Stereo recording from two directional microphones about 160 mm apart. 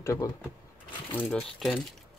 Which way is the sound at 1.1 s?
5° left (ahead or behind).